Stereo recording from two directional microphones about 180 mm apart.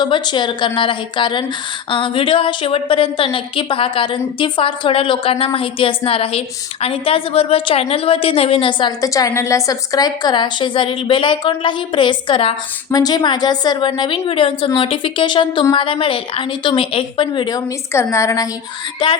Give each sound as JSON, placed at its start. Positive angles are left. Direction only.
{"t": 0.0, "sound": "a woman's voice", "side_deg": 25}